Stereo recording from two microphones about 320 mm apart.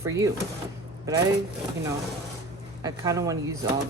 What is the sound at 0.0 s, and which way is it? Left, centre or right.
Speech, centre.